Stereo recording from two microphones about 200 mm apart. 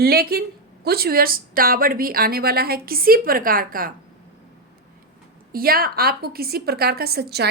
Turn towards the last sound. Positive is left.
turn(degrees=-55)  # may be behind; listen again after turning